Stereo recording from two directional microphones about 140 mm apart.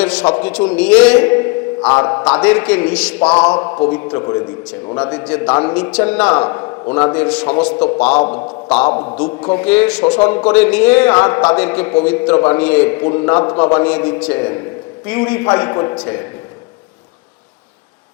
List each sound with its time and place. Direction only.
0.0 s a man's voice: 10° left (ahead or behind)
3.6 s a man's voice: 25° left (ahead or behind)
5.0 s a man's voice: 10° left (ahead or behind)
6.9 s a man's voice: 15° left (ahead or behind)
8.9 s a man's voice: 30° left (ahead or behind)
9.1 s a man's voice: 10° left (ahead or behind)
13.7 s a man's voice: 10° left (ahead or behind)